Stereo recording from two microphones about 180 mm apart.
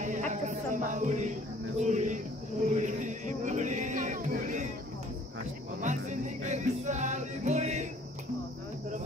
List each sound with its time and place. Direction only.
0.0 s music: 40° right (ahead or behind)
1.8 s cricket: 40° right (ahead or behind)
5.8 s music: 40° right (ahead or behind)